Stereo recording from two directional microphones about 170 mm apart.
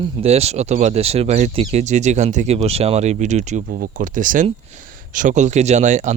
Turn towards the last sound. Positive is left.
turn(degrees=-45)  # may be behind; listen again after turning